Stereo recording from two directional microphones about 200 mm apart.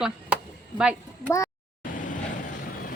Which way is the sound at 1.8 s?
40° left (ahead or behind).